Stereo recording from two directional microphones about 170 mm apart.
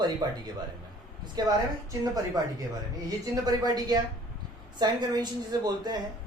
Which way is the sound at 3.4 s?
25° right (ahead or behind).